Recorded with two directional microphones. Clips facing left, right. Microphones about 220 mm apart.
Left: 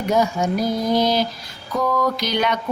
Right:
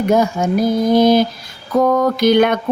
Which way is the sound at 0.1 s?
50° right (ahead or behind).